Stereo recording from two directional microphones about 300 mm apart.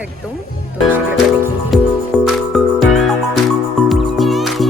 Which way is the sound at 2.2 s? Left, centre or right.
Centre.